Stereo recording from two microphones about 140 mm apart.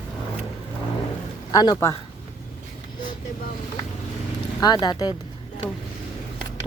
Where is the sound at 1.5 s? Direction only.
25° left (ahead or behind).